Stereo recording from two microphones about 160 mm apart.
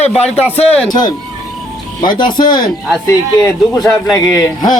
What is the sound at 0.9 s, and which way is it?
Speech, 25° left (ahead or behind).